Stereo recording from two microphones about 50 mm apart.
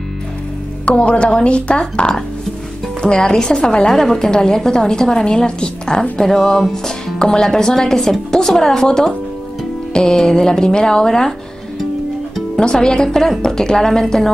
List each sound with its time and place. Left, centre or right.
0.8 s speech: left
12.5 s speech: centre